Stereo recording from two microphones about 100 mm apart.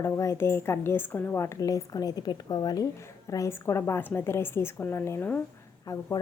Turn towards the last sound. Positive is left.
turn(degrees=35)  # may be behind; listen again after turning